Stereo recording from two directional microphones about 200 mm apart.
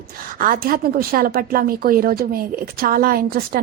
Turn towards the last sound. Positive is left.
turn(degrees=-50)  # may be behind; listen again after turning